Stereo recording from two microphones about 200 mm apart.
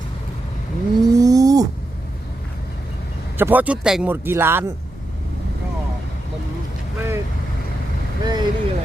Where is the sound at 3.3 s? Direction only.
10° right (ahead or behind).